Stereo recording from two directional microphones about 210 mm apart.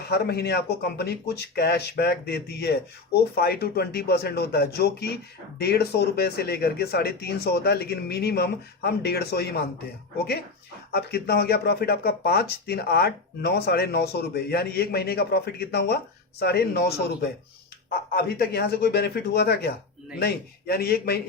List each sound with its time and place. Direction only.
0.1 s speech: 50° left (ahead or behind)
10.9 s speech: 50° left (ahead or behind)